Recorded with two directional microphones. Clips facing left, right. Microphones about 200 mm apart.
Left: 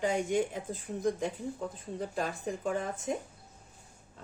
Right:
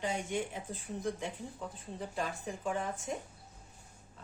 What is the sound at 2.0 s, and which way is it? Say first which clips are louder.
Speech: left 3 dB; 45° left (ahead or behind).